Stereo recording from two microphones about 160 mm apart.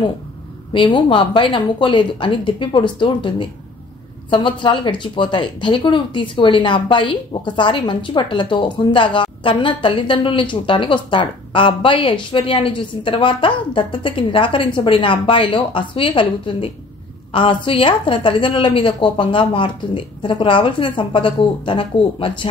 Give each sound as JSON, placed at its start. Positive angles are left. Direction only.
{"t": 0.7, "sound": "speech", "side_deg": 30}